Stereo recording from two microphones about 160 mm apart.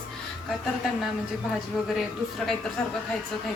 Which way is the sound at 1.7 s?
Centre (ahead or behind).